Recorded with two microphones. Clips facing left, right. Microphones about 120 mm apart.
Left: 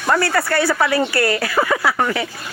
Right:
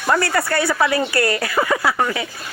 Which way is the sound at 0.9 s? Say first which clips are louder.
Left 1 dB; 30° left (ahead or behind).